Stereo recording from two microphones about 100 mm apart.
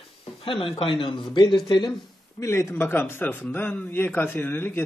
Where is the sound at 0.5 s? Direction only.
60° left (ahead or behind).